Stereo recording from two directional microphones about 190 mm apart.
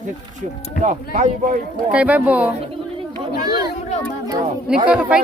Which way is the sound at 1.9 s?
10° right (ahead or behind).